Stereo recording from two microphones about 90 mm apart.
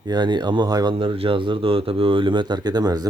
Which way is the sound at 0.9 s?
90° right.